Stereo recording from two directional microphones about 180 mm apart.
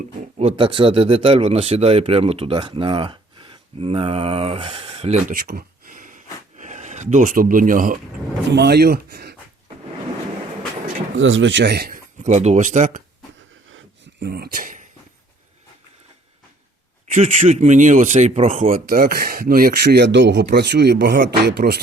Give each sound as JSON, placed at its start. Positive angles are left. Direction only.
{"t": 0.3, "sound": "speech", "side_deg": -30}
{"t": 5.3, "sound": "a sound", "side_deg": -55}
{"t": 6.6, "sound": "speech", "side_deg": -40}
{"t": 8.5, "sound": "speech", "side_deg": -65}
{"t": 11.2, "sound": "speech", "side_deg": -90}
{"t": 13.7, "sound": "a sound", "side_deg": -80}
{"t": 17.1, "sound": "speech", "side_deg": -40}
{"t": 18.9, "sound": "speech", "side_deg": -55}